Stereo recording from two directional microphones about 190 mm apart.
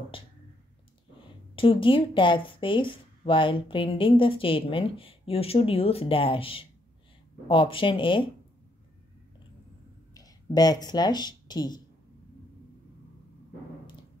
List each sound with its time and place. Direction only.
0.1 s a sound: 30° left (ahead or behind)
1.5 s speech: 25° left (ahead or behind)
10.1 s speech: 20° left (ahead or behind)